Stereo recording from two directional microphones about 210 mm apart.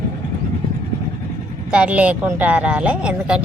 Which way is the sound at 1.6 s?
5° right (ahead or behind).